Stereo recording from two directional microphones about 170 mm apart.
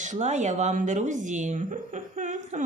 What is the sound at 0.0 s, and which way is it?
A woman's voice, 45° right (ahead or behind).